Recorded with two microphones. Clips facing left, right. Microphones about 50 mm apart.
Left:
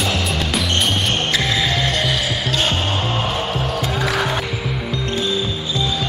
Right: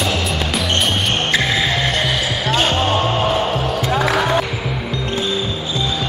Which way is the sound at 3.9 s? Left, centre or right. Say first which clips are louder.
Right 6 dB; centre.